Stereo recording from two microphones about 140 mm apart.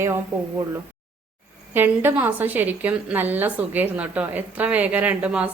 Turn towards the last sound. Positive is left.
turn(degrees=-10)  # may be behind; listen again after turning